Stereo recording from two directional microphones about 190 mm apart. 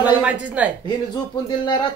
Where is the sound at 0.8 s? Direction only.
25° left (ahead or behind).